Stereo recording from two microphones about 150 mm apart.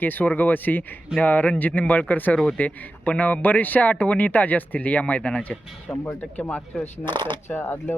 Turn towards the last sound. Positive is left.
turn(degrees=10)  # may be behind; listen again after turning